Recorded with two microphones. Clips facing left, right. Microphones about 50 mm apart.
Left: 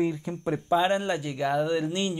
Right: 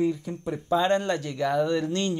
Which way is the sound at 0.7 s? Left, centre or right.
Centre.